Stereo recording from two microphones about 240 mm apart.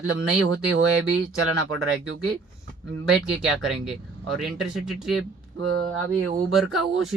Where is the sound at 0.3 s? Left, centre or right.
Right.